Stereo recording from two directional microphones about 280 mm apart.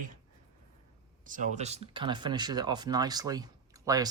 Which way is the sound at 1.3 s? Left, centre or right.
Right.